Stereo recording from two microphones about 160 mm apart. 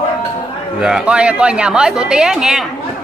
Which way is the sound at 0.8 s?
5° right (ahead or behind).